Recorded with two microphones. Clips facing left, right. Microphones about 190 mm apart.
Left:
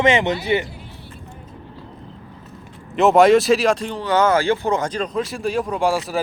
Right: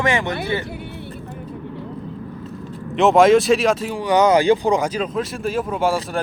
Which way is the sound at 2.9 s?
Centre (ahead or behind).